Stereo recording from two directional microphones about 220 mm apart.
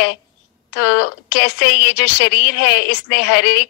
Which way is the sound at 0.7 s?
50° left (ahead or behind).